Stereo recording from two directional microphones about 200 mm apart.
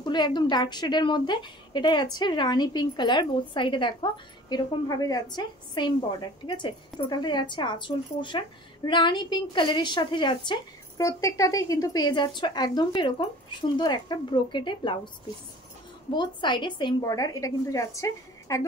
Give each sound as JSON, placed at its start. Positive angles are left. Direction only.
{"t": 0.0, "sound": "a woman's voice", "side_deg": 20}
{"t": 16.2, "sound": "a woman's voice", "side_deg": 25}